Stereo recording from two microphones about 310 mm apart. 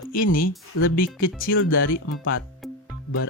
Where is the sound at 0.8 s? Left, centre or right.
Left.